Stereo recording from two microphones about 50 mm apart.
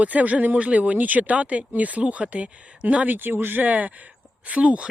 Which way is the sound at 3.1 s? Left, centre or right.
Right.